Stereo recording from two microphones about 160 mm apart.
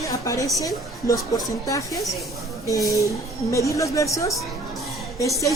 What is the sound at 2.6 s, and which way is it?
Speech, 20° left (ahead or behind).